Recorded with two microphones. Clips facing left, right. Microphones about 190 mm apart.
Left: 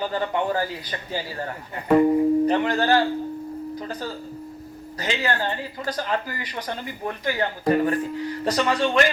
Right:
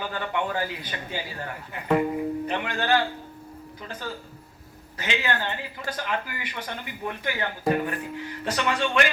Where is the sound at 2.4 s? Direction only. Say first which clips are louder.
Left 8 dB; 40° left (ahead or behind).